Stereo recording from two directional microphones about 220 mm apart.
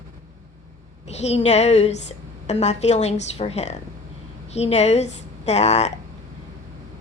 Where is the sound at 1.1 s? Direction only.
30° left (ahead or behind).